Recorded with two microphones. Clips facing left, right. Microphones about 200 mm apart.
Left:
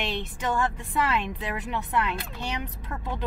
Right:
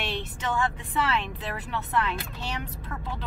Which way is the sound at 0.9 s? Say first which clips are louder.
Left 2 dB; 15° left (ahead or behind).